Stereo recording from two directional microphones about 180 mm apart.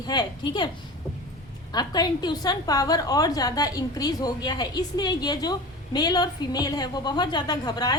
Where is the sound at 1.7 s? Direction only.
25° left (ahead or behind).